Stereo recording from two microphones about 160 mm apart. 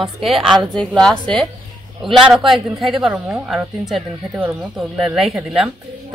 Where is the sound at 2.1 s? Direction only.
Centre (ahead or behind).